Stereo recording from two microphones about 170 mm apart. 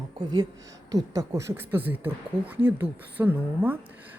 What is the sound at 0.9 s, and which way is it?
Speech, 20° right (ahead or behind).